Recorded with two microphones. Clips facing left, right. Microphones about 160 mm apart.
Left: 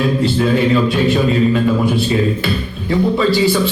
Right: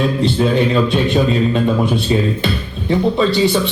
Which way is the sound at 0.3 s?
25° right (ahead or behind).